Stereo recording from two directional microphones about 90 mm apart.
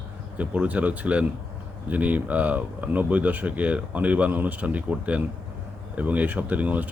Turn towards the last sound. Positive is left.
turn(degrees=-15)  # may be behind; listen again after turning